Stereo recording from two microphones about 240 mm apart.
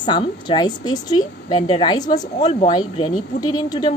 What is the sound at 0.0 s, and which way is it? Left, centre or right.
A woman's voice, centre.